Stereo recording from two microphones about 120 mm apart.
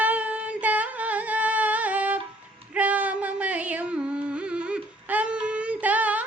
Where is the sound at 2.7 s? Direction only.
10° right (ahead or behind).